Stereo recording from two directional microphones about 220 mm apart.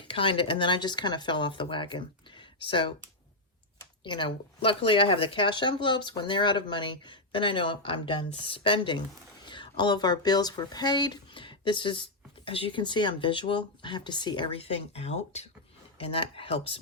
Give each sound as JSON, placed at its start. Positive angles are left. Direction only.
{"t": 0.0, "sound": "speech", "side_deg": 25}
{"t": 4.0, "sound": "speech", "side_deg": 20}